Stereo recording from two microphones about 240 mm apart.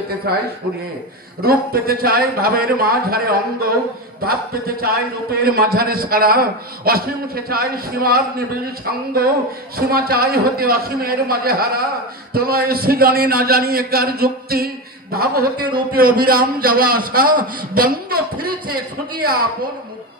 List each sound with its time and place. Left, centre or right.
0.3 s a man's voice: right